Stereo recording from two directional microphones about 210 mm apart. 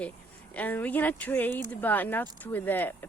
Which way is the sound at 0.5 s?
10° left (ahead or behind).